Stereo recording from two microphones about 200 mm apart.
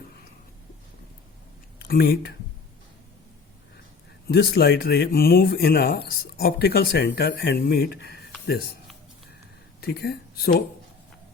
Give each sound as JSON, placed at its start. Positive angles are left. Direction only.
{"t": 1.8, "sound": "speech", "side_deg": 50}
{"t": 4.3, "sound": "speech", "side_deg": 50}
{"t": 9.8, "sound": "speech", "side_deg": 55}